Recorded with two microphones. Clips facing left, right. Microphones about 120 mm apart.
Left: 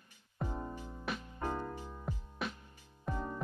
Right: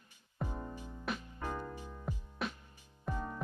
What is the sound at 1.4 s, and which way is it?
Music, 20° left (ahead or behind).